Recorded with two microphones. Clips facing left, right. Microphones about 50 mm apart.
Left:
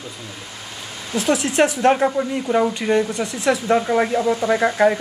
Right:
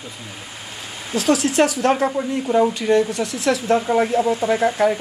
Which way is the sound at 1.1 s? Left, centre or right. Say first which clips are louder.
Right 1 dB; left.